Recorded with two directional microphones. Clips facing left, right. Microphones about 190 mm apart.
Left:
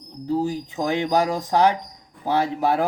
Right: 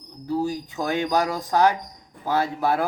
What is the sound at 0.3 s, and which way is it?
Speech, 15° left (ahead or behind).